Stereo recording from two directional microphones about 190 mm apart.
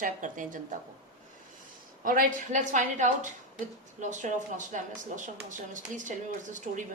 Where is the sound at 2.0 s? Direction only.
45° right (ahead or behind).